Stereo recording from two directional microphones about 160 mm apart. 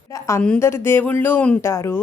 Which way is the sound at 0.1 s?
20° left (ahead or behind).